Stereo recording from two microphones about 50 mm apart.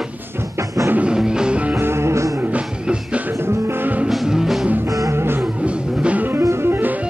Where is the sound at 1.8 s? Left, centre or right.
Right.